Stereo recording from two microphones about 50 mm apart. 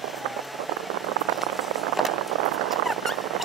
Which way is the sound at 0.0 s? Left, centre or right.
Centre.